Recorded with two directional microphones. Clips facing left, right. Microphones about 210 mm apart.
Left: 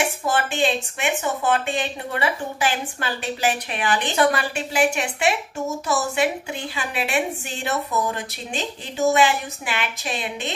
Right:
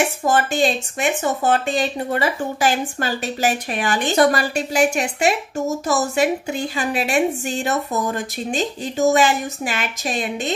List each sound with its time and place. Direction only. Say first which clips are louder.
0.2 s a woman's voice: right 5 dB; 40° right (ahead or behind)